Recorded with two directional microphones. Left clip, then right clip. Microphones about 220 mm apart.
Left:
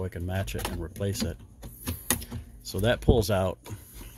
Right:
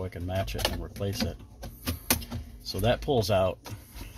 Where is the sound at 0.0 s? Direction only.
35° left (ahead or behind).